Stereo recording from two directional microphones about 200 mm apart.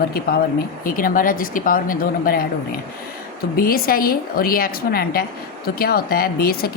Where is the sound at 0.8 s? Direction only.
45° left (ahead or behind).